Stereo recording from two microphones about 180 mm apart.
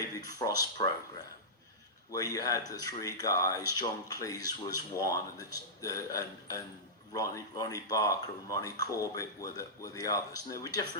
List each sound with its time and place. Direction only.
0.3 s speech: 20° left (ahead or behind)
2.1 s speech: 20° left (ahead or behind)